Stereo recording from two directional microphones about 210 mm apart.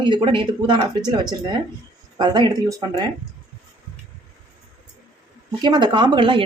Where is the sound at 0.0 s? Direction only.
25° right (ahead or behind).